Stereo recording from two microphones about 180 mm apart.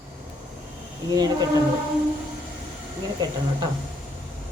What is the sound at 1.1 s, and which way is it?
Speech, 20° right (ahead or behind).